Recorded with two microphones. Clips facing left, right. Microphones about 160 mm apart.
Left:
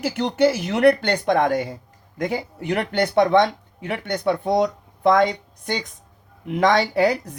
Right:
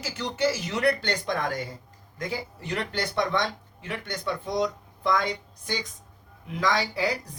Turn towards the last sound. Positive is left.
turn(degrees=60)  # may be behind; listen again after turning